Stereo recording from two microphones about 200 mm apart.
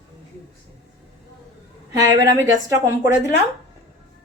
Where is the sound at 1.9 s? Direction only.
15° right (ahead or behind).